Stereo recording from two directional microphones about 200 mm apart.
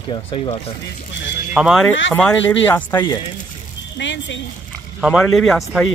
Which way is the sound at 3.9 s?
65° left (ahead or behind).